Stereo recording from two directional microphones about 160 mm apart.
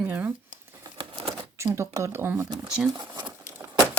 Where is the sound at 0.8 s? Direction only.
35° right (ahead or behind).